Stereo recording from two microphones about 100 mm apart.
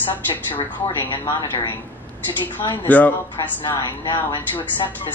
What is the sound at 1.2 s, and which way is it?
Speech, 25° left (ahead or behind).